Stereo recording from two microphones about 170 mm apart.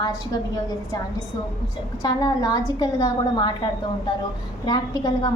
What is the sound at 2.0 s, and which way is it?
A woman's voice, 20° left (ahead or behind).